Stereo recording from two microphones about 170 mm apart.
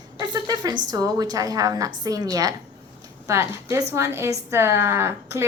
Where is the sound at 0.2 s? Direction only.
25° right (ahead or behind).